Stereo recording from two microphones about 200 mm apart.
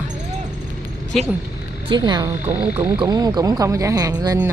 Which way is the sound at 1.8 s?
20° right (ahead or behind).